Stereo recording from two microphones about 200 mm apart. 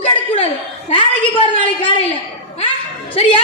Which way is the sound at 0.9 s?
25° left (ahead or behind).